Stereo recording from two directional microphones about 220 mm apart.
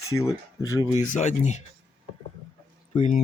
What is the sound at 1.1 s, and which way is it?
Speech, 35° left (ahead or behind).